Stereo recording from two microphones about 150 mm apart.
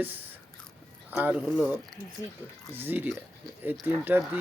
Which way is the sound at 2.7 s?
15° right (ahead or behind).